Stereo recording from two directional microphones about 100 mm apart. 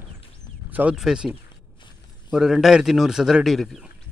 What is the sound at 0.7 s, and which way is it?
Speech, 15° right (ahead or behind).